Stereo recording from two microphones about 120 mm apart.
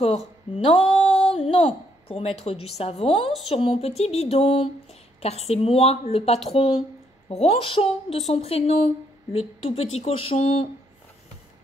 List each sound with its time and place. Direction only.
0.0 s speech: 65° left (ahead or behind)
1.3 s a sound: 55° left (ahead or behind)
2.0 s speech: 55° left (ahead or behind)